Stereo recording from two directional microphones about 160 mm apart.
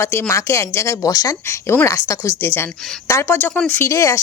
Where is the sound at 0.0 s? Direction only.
15° left (ahead or behind).